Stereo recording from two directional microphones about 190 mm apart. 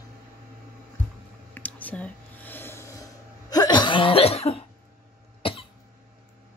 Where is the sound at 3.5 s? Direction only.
20° left (ahead or behind).